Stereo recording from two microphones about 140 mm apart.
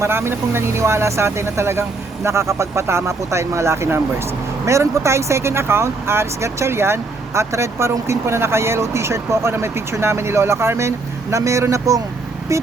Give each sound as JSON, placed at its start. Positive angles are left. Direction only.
{"t": 0.0, "sound": "speech", "side_deg": -15}